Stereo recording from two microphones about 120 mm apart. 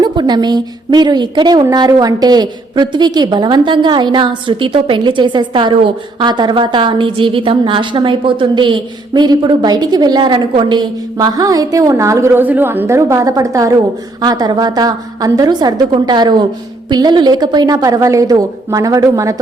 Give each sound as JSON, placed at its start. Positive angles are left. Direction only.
{"t": 0.0, "sound": "a woman's voice", "side_deg": -35}